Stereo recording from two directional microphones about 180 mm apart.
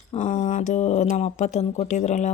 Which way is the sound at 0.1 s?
40° left (ahead or behind).